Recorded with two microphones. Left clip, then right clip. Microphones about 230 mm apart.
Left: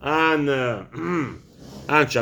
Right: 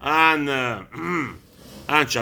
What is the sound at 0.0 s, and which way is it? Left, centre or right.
A man's voice, centre.